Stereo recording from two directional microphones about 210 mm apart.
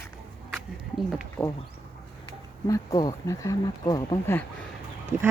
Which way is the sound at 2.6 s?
15° left (ahead or behind).